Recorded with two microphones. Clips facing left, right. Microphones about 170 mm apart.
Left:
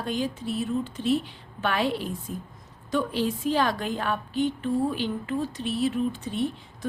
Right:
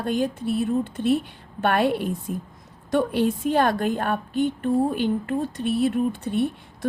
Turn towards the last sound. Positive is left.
turn(degrees=-55)  # may be behind; listen again after turning